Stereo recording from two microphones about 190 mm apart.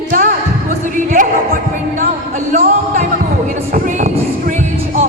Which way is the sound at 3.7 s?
50° right (ahead or behind).